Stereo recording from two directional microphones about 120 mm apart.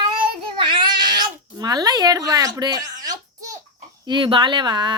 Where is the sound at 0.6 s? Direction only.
40° right (ahead or behind).